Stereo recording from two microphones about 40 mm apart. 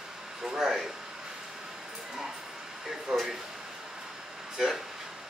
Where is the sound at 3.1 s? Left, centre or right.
Centre.